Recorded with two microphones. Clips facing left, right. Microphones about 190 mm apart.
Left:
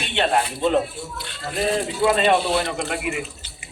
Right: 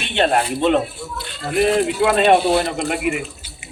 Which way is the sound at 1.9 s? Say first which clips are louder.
Right 3 dB; 70° right (ahead or behind).